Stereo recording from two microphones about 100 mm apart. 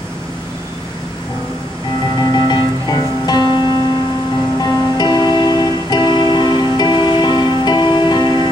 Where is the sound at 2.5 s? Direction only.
50° left (ahead or behind).